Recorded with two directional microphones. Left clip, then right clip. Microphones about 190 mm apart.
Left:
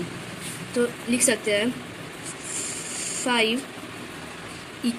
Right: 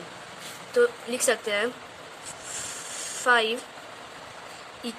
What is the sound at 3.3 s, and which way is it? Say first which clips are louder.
Speech: right 1 dB; 55° right (ahead or behind).